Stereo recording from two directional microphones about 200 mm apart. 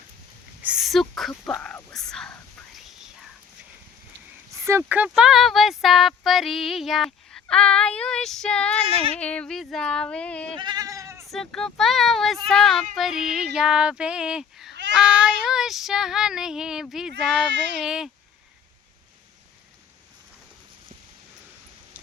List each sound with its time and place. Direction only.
0.6 s whispering: 5° right (ahead or behind)
4.5 s speech: 15° right (ahead or behind); by 10.5 s 5° left (ahead or behind)
10.6 s goat: 20° right (ahead or behind)
11.3 s speech: centre (ahead or behind)